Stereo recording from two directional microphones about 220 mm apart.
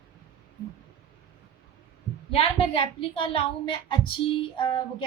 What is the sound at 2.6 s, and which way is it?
Speech, 25° left (ahead or behind).